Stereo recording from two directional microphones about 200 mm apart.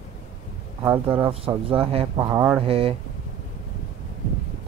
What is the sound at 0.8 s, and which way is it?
Speech, 10° right (ahead or behind).